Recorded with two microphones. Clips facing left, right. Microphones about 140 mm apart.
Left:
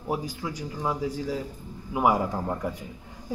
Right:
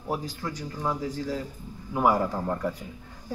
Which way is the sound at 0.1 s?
10° left (ahead or behind).